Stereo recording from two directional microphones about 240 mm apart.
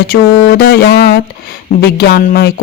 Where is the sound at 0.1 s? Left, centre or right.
Left.